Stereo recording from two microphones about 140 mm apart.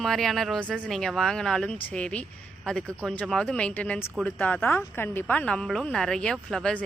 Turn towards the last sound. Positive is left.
turn(degrees=5)  # may be behind; listen again after turning